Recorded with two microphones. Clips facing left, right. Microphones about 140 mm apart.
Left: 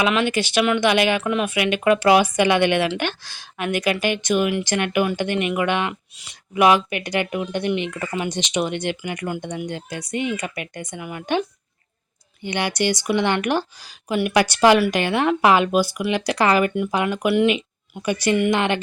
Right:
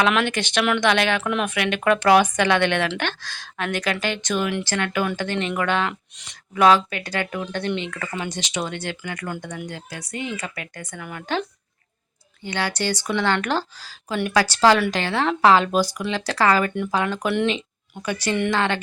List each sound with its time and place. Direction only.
0.0 s a woman's voice: 5° left (ahead or behind)